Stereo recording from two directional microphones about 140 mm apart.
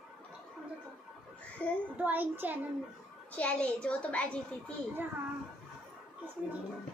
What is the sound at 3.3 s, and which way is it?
Speech, 10° left (ahead or behind).